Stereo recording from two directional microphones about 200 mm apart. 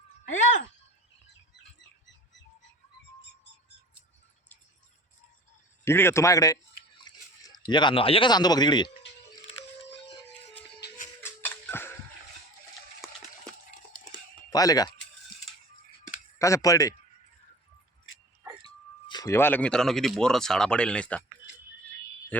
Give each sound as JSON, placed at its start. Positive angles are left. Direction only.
{"t": 3.2, "sound": "music", "side_deg": 60}
{"t": 5.8, "sound": "a man's voice", "side_deg": 10}
{"t": 10.8, "sound": "music", "side_deg": 55}
{"t": 11.2, "sound": "a sound", "side_deg": 10}
{"t": 14.5, "sound": "speech", "side_deg": 20}
{"t": 16.4, "sound": "a man's voice", "side_deg": 15}
{"t": 18.6, "sound": "speech", "side_deg": 20}